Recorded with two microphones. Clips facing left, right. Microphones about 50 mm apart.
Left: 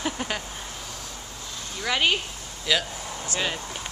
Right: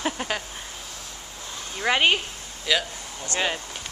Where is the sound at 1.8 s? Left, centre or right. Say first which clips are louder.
Right 3 dB; right.